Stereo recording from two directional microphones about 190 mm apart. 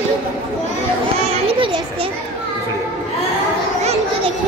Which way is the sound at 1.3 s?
30° right (ahead or behind).